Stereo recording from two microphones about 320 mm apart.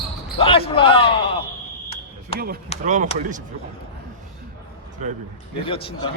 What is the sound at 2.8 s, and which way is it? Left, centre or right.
Speech, right.